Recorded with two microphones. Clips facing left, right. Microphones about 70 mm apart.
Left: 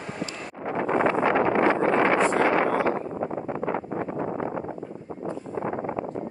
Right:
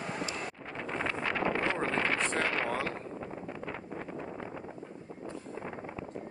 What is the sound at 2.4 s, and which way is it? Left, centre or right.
Wind noise, left.